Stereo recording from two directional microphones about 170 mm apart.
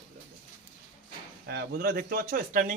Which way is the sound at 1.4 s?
70° right (ahead or behind).